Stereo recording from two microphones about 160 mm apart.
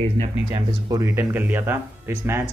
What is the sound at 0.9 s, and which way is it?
Speech, 15° right (ahead or behind).